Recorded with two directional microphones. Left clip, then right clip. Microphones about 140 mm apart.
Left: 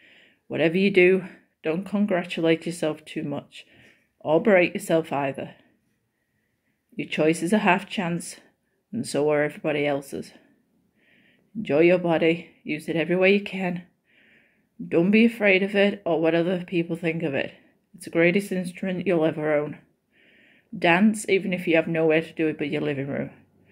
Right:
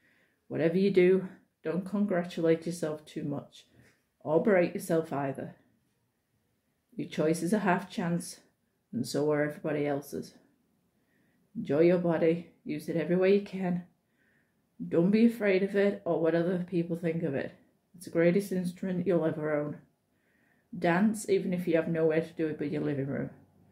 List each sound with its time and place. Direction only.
0.5 s speech: 30° left (ahead or behind)
7.1 s speech: 40° left (ahead or behind)
11.6 s speech: 35° left (ahead or behind)
14.9 s speech: 30° left (ahead or behind)
20.8 s speech: 40° left (ahead or behind)